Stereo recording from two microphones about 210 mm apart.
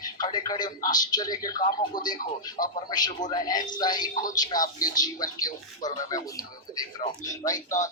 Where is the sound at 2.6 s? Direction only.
40° left (ahead or behind).